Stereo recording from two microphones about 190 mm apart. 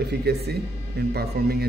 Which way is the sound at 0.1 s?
60° right (ahead or behind).